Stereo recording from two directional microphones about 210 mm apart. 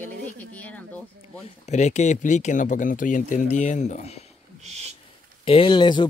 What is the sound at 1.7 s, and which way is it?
Speech, 35° left (ahead or behind).